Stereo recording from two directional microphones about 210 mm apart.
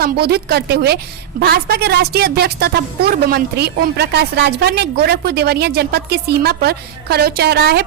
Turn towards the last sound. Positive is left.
turn(degrees=-50)  # may be behind; listen again after turning